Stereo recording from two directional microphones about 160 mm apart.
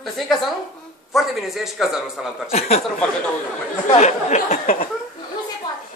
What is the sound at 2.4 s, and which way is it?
Speech, 40° left (ahead or behind).